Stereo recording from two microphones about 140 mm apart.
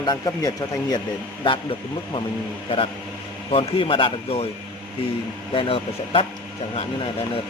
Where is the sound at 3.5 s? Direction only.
40° left (ahead or behind).